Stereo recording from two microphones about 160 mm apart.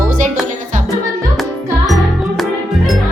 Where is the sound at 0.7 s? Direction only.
50° right (ahead or behind).